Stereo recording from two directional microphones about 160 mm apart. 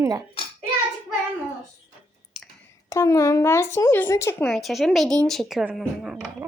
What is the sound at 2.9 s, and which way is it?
Speech, 20° left (ahead or behind).